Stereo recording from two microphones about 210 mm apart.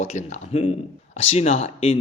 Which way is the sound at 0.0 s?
35° left (ahead or behind).